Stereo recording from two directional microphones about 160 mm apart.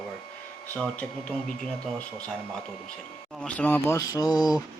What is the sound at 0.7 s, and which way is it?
Speech, 5° left (ahead or behind).